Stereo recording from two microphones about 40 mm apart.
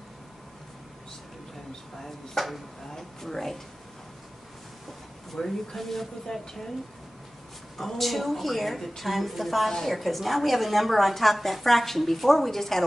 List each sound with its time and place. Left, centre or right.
2.0 s a woman's voice: centre
5.3 s speech: centre
7.7 s a woman's voice: centre